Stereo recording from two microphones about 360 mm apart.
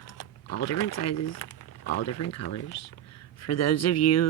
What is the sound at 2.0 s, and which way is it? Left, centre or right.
Speech, left.